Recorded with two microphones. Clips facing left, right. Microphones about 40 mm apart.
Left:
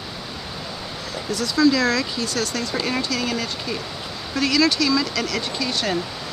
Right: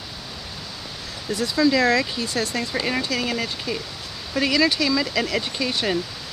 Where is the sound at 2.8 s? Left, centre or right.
Centre.